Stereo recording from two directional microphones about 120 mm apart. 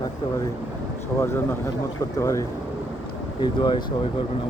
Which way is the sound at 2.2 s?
25° left (ahead or behind).